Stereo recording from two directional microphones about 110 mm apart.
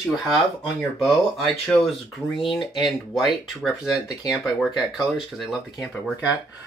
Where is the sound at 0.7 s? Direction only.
Centre (ahead or behind).